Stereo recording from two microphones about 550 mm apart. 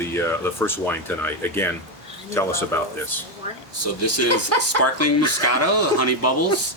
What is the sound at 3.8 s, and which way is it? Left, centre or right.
Speech, left.